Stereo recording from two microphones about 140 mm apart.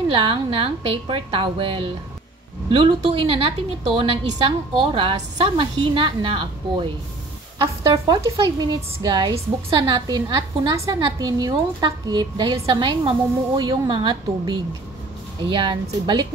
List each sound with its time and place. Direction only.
0.1 s speech: 40° right (ahead or behind)
7.6 s speech: 25° right (ahead or behind)